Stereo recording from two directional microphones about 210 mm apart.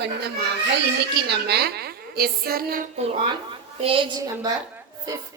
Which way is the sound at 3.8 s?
25° right (ahead or behind).